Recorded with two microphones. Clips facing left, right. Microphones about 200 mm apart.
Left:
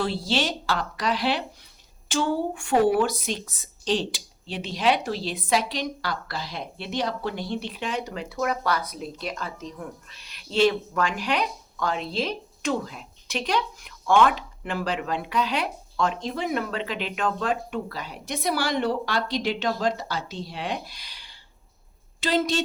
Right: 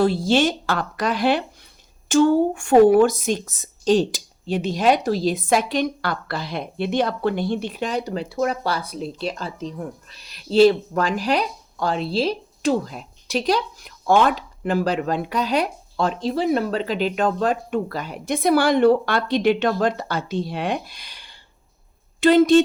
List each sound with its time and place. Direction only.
0.0 s a woman's voice: 45° right (ahead or behind)